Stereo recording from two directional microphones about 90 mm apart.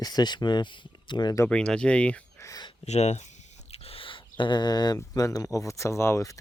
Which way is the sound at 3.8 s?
80° left.